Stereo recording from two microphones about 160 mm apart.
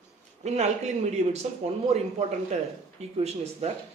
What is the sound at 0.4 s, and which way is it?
A man's voice, 45° right (ahead or behind).